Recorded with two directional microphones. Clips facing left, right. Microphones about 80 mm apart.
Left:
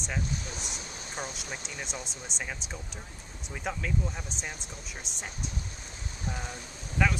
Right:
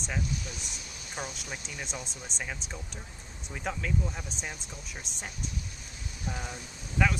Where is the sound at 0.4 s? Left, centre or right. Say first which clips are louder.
Left 2 dB; left.